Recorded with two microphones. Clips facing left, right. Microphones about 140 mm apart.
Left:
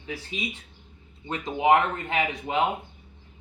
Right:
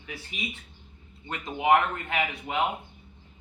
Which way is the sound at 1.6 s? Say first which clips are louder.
Left 2 dB; 30° left (ahead or behind).